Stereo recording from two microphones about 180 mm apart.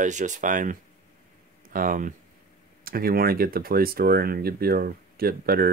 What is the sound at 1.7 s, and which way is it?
Speech, 50° right (ahead or behind).